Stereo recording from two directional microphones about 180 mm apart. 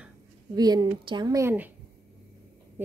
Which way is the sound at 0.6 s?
20° right (ahead or behind).